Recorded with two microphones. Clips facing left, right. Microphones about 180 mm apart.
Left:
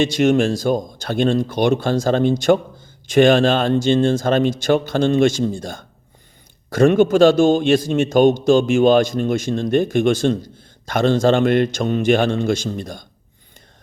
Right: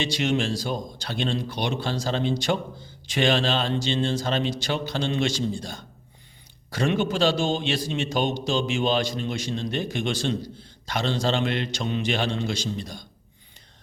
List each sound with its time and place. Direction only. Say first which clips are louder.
0.0 s a man's voice: left 9 dB; 50° left (ahead or behind)